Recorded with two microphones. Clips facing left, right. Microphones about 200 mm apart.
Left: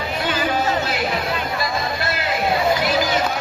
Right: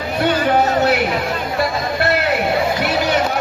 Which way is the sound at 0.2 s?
65° right (ahead or behind).